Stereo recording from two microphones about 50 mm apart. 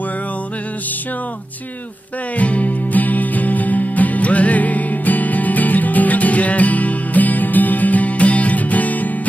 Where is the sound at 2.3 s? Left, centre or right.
Left.